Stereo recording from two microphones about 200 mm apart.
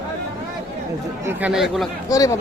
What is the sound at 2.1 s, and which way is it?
Speech, 15° left (ahead or behind).